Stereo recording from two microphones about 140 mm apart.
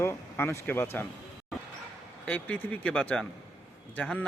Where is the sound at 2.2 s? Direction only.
10° left (ahead or behind).